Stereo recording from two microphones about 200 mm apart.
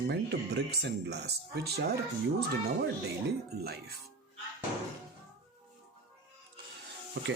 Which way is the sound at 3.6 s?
50° right (ahead or behind).